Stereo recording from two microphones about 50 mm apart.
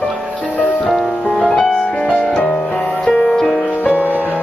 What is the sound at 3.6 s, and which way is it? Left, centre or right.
Music, left.